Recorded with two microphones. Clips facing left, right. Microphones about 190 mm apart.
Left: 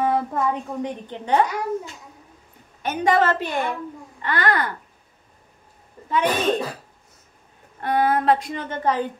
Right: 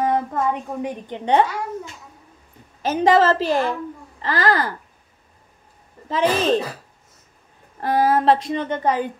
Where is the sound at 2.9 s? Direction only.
30° right (ahead or behind).